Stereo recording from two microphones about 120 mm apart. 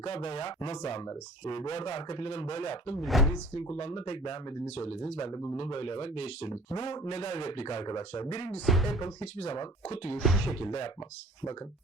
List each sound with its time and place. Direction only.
0.0 s speech: 55° left (ahead or behind)
3.0 s speech: centre (ahead or behind)
3.6 s speech: 55° left (ahead or behind)
4.6 s speech: 60° left (ahead or behind)
5.3 s speech: 25° left (ahead or behind)
5.5 s speech: 45° left (ahead or behind)
7.1 s speech: 60° left (ahead or behind)
8.6 s speech: centre (ahead or behind)
9.2 s speech: 60° left (ahead or behind)
10.2 s speech: centre (ahead or behind)